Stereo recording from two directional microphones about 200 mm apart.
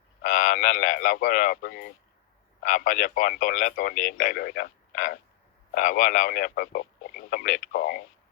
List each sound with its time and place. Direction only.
0.2 s speech: 40° left (ahead or behind)